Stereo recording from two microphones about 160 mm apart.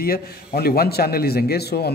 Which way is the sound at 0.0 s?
70° left (ahead or behind).